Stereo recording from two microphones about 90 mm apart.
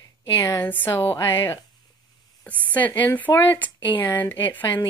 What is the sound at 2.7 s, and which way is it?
Speech, 20° left (ahead or behind).